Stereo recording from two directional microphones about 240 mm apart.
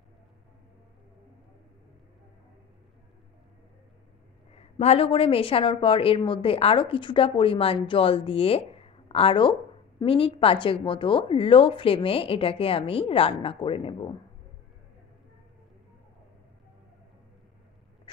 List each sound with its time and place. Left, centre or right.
4.6 s a woman's voice: left